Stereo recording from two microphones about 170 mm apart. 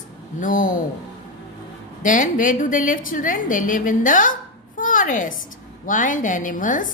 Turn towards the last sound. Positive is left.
turn(degrees=50)  # may be behind; listen again after turning